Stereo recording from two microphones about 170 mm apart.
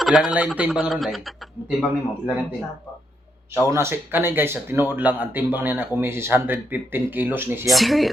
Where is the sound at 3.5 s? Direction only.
15° right (ahead or behind).